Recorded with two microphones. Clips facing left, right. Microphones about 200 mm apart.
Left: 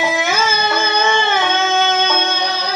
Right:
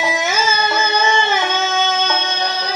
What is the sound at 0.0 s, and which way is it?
Music, 60° left (ahead or behind).